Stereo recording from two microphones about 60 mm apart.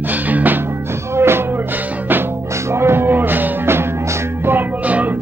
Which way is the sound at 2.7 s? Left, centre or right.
Right.